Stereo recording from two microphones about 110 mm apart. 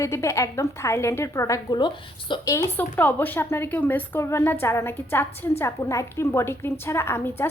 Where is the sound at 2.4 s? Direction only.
25° left (ahead or behind).